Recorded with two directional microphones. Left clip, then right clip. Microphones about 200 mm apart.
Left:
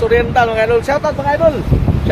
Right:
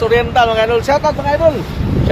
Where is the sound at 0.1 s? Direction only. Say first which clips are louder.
Right 1 dB; 20° right (ahead or behind).